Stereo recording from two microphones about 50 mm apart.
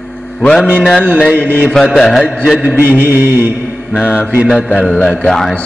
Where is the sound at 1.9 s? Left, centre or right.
Centre.